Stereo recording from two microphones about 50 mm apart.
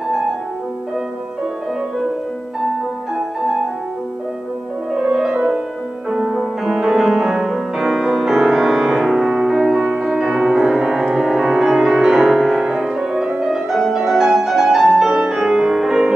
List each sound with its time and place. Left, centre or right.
4.9 s music: centre
6.3 s music: centre